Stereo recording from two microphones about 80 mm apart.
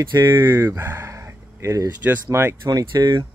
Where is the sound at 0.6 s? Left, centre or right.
Right.